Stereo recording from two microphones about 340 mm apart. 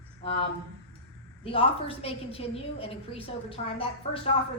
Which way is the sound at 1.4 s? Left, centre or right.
Centre.